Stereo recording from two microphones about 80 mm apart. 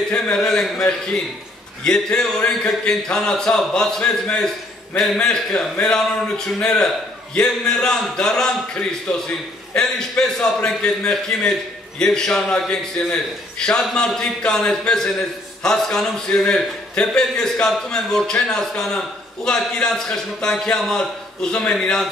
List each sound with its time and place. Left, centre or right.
0.1 s a man's voice: centre